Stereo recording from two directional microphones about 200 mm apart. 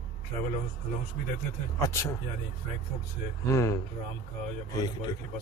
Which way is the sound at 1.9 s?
15° left (ahead or behind).